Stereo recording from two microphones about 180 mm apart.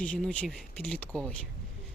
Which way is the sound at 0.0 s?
5° left (ahead or behind).